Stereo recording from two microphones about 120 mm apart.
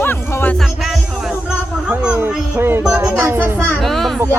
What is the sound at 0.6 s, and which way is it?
Speech, centre (ahead or behind).